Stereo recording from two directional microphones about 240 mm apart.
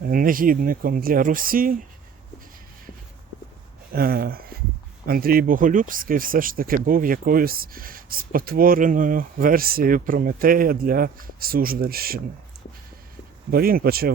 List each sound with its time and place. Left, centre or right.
0.0 s speech: right
3.9 s speech: right
13.5 s speech: right